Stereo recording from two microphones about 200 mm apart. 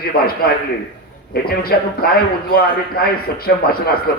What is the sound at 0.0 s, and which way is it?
A man's voice, 50° left (ahead or behind).